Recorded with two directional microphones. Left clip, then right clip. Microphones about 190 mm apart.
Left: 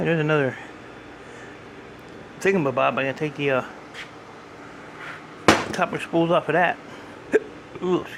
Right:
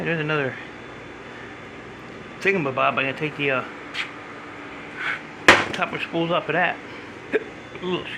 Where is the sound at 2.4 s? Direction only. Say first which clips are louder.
Even; 40° left (ahead or behind).